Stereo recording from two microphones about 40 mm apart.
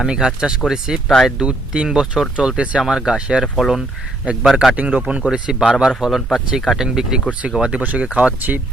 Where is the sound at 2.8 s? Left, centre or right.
Centre.